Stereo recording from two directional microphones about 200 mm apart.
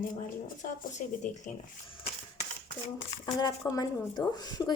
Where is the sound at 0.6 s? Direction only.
40° left (ahead or behind).